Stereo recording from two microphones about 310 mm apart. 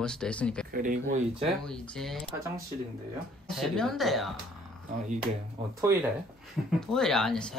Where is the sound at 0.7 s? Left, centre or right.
Right.